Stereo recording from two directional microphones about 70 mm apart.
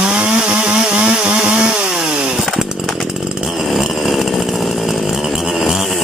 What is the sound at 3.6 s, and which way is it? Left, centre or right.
Chainsaw, centre.